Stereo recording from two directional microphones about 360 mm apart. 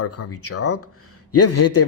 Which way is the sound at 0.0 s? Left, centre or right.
Left.